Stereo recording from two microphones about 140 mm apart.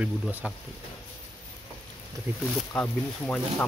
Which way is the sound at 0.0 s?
10° right (ahead or behind).